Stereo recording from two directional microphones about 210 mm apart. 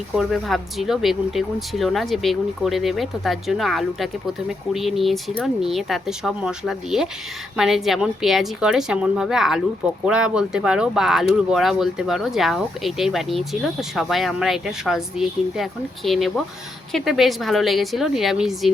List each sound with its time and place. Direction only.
0.2 s speech: centre (ahead or behind)